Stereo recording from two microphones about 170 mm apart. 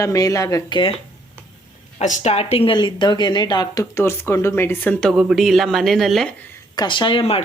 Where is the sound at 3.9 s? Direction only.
15° left (ahead or behind).